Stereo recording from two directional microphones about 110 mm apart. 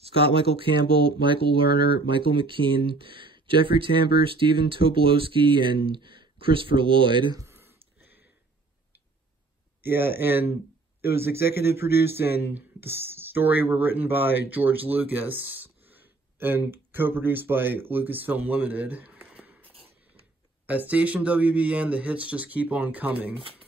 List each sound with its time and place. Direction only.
0.0 s speech: 60° right (ahead or behind)
7.3 s a sound: 25° right (ahead or behind)
9.8 s speech: 20° right (ahead or behind)
20.6 s speech: 15° right (ahead or behind)